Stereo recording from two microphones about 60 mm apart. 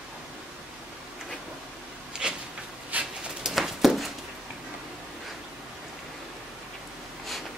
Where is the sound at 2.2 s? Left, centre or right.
Centre.